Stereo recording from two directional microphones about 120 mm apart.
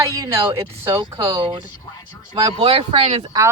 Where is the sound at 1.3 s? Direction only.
45° right (ahead or behind).